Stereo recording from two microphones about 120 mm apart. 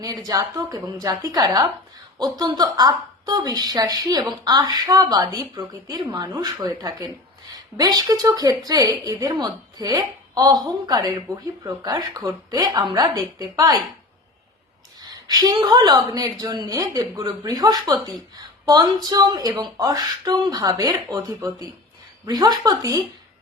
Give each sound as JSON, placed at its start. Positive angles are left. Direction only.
{"t": 0.0, "sound": "a woman's voice", "side_deg": -30}
{"t": 15.3, "sound": "a woman's voice", "side_deg": -35}